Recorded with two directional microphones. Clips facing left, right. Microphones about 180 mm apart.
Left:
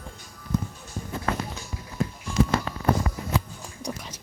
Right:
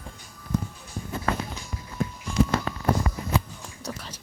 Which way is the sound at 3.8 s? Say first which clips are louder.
Left 2 dB; 15° left (ahead or behind).